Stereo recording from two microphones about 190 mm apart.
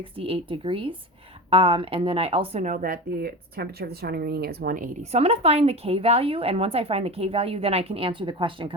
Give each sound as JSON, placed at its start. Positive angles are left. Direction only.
{"t": 0.2, "sound": "a woman's voice", "side_deg": -30}
{"t": 5.1, "sound": "a woman's voice", "side_deg": -30}